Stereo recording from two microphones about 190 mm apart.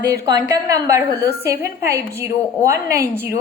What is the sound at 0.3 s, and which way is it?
A woman's voice, 20° right (ahead or behind).